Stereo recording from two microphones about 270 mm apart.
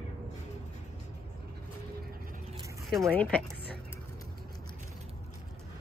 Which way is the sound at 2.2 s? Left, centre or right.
Right.